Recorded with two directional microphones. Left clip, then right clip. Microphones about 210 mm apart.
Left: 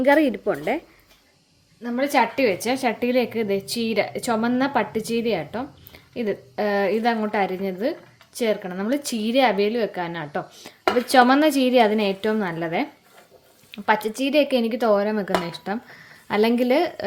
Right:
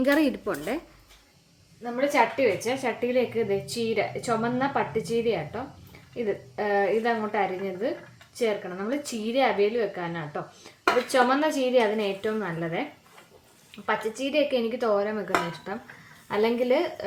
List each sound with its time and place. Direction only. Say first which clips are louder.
0.0 s speech: left 6 dB; 15° left (ahead or behind)
1.8 s a woman's voice: left 2 dB; 45° left (ahead or behind)